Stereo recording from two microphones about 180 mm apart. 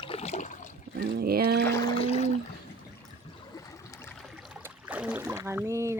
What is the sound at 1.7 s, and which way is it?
Boat, 20° left (ahead or behind).